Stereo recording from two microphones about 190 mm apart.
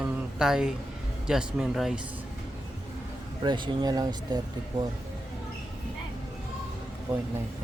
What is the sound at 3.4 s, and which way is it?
Speech, 25° right (ahead or behind).